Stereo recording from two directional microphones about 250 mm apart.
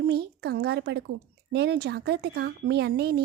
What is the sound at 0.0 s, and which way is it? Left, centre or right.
A woman's voice, right.